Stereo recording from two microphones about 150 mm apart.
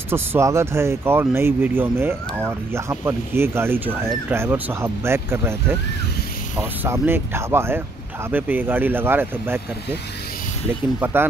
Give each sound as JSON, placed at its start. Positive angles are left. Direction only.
{"t": 0.1, "sound": "speech", "side_deg": -15}